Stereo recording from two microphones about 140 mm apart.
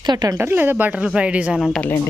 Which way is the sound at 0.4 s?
15° right (ahead or behind).